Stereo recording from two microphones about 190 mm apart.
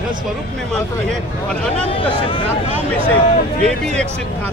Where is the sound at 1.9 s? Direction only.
30° left (ahead or behind).